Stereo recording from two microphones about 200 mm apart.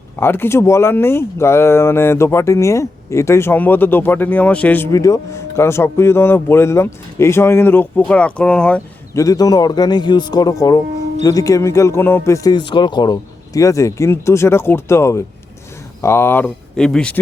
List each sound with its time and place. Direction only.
0.2 s speech: 10° left (ahead or behind)
9.2 s speech: 20° left (ahead or behind)